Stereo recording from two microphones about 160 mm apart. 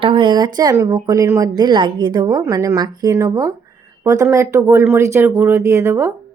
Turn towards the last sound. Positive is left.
turn(degrees=-15)  # may be behind; listen again after turning